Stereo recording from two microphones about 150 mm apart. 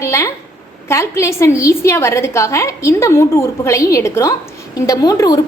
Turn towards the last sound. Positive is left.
turn(degrees=25)  # may be behind; listen again after turning